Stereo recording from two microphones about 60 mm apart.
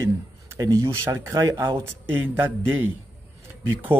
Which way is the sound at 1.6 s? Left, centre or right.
Right.